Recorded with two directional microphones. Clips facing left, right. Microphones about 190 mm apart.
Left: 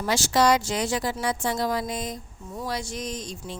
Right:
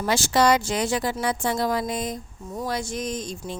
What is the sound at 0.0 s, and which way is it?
A woman's voice, 55° right (ahead or behind).